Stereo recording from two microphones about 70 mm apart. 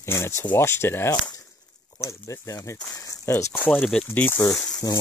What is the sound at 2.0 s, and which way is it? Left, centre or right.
Speech, left.